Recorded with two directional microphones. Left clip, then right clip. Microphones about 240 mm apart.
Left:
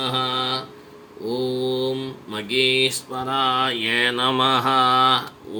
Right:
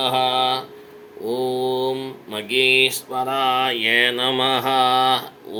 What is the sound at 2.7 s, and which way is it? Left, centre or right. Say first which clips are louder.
Mantra: right 3 dB; centre.